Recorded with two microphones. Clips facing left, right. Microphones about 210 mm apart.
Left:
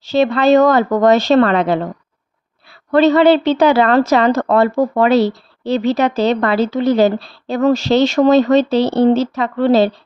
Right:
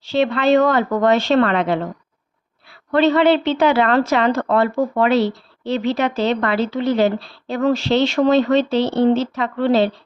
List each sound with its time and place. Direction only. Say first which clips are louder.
0.0 s a woman's voice: left 4 dB; 40° left (ahead or behind)
2.9 s a woman's voice: left 4 dB; 40° left (ahead or behind)